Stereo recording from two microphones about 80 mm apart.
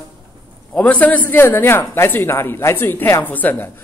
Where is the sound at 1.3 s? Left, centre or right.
Left.